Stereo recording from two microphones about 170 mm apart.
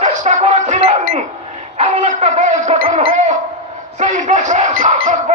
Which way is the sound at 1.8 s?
40° right (ahead or behind).